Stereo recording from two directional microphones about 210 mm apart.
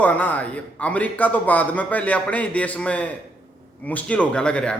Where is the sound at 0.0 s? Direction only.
5° left (ahead or behind).